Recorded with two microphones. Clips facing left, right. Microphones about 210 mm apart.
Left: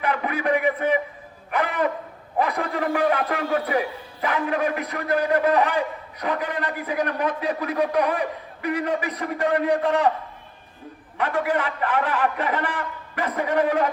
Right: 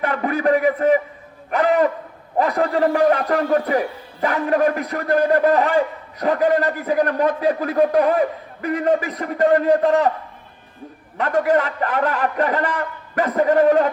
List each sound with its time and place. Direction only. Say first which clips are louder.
0.0 s a man's voice: right 5 dB; 40° right (ahead or behind)
11.2 s a man's voice: right 5 dB; 40° right (ahead or behind)